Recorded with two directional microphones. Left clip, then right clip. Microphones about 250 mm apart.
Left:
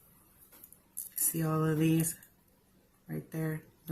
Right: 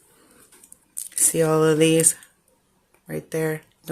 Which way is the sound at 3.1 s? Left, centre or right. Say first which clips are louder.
Right 14 dB; right.